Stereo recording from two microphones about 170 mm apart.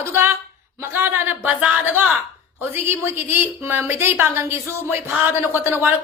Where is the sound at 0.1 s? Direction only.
15° right (ahead or behind).